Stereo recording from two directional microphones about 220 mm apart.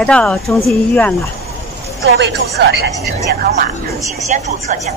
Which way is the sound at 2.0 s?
50° right (ahead or behind).